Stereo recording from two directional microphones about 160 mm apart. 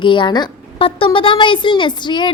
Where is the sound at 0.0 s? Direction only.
30° left (ahead or behind).